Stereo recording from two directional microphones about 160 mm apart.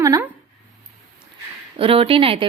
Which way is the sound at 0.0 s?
20° right (ahead or behind).